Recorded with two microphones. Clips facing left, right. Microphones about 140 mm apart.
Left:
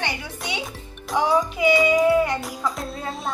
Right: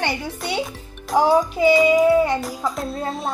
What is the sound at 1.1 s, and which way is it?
Speech, 45° right (ahead or behind).